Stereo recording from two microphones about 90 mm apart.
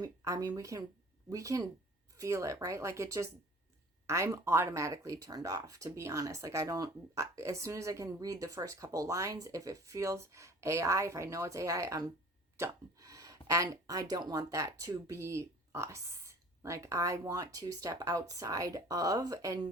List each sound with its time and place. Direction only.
0.0 s speech: 40° right (ahead or behind)